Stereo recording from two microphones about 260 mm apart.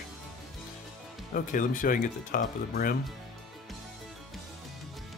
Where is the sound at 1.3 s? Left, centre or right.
Left.